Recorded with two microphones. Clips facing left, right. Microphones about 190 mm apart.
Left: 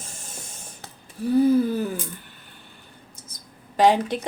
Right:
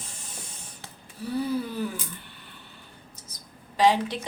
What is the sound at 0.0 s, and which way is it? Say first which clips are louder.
Spray: left 3 dB; 45° left (ahead or behind).